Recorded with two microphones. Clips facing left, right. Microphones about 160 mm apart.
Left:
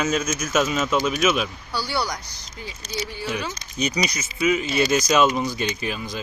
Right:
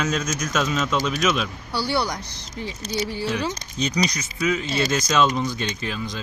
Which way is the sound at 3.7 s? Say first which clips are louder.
Left 1 dB; 10° left (ahead or behind).